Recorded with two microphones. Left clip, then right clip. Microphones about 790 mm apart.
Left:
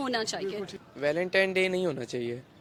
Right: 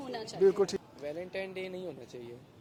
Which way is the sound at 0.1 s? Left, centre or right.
Left.